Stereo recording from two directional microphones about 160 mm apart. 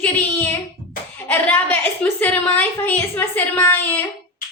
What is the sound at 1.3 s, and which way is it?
A woman's voice, 10° left (ahead or behind).